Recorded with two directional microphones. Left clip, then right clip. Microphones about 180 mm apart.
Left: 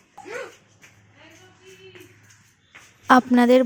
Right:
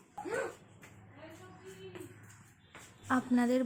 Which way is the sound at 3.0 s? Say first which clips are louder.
Left 16 dB; 55° left (ahead or behind).